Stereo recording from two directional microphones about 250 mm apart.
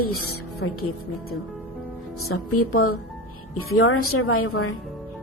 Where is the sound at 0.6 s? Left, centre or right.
Left.